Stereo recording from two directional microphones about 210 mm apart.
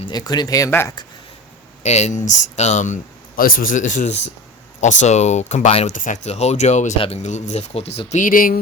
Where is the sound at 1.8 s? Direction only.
30° left (ahead or behind).